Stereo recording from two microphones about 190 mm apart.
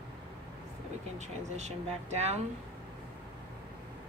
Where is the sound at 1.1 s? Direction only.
35° right (ahead or behind).